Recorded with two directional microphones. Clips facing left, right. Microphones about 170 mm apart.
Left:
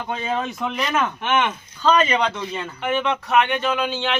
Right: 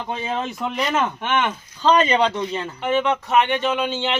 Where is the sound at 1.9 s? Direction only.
20° right (ahead or behind).